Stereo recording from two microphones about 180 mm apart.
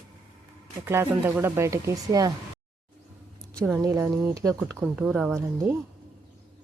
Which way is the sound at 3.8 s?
15° right (ahead or behind).